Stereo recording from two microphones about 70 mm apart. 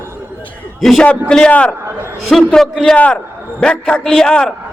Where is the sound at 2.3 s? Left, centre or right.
Centre.